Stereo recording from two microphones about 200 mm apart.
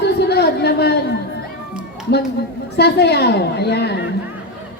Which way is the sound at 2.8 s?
55° left (ahead or behind).